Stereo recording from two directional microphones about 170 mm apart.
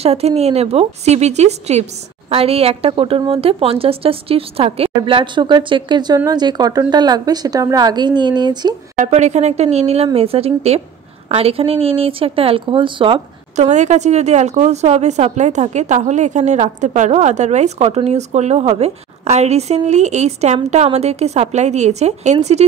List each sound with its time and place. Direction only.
0.0 s a woman's voice: 35° right (ahead or behind)
8.9 s a woman's voice: 45° right (ahead or behind)
13.7 s a woman's voice: 45° right (ahead or behind)